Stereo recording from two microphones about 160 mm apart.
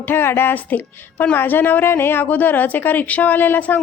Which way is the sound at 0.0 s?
15° left (ahead or behind).